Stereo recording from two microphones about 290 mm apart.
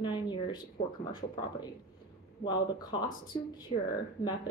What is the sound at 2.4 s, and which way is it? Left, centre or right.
Speech, centre.